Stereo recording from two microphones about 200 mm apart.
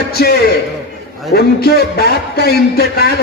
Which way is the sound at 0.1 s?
50° left (ahead or behind).